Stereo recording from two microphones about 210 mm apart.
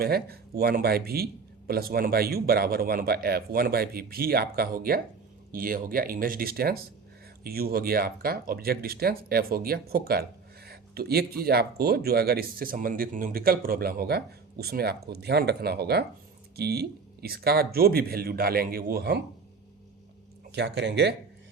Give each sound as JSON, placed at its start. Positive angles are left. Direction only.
{"t": 0.0, "sound": "speech", "side_deg": -45}
{"t": 20.5, "sound": "speech", "side_deg": -55}